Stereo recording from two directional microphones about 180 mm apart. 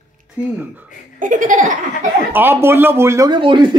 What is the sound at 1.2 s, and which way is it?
Laughter, 45° right (ahead or behind).